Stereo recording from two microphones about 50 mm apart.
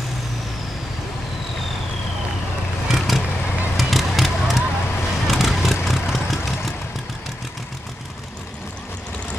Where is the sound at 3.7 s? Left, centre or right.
Centre.